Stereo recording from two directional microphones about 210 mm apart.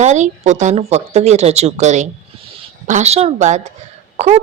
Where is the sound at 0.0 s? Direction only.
35° right (ahead or behind).